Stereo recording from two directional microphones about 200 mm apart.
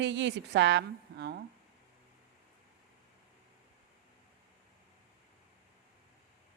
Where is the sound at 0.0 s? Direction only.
65° right (ahead or behind).